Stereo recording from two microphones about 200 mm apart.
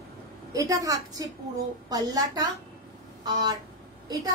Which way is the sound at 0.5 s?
15° right (ahead or behind).